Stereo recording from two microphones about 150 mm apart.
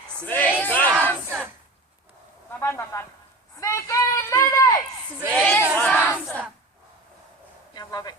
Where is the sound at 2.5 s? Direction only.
15° left (ahead or behind).